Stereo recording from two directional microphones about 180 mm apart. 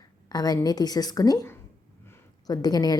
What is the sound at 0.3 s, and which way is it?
A woman's voice, 20° left (ahead or behind).